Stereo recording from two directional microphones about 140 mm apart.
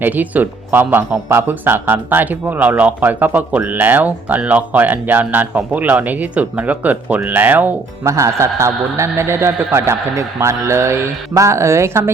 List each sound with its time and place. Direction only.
0.0 s speech: 10° right (ahead or behind)
8.0 s a man's voice: 20° right (ahead or behind)